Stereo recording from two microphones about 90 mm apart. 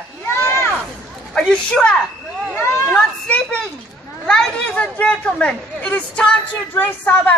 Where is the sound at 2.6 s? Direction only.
30° left (ahead or behind).